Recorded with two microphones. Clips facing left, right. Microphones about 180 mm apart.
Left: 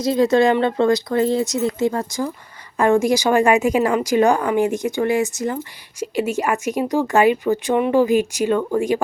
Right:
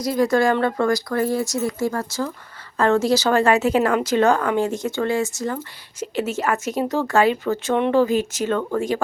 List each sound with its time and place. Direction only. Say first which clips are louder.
0.0 s speech: left 3 dB; 25° left (ahead or behind)